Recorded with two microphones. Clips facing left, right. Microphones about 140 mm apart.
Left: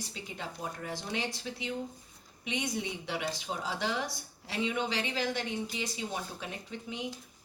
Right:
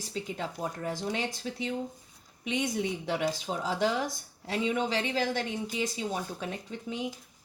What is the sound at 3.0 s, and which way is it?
Speech, 40° right (ahead or behind).